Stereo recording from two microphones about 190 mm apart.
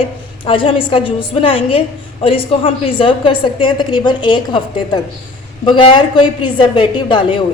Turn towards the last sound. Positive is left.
turn(degrees=25)  # may be behind; listen again after turning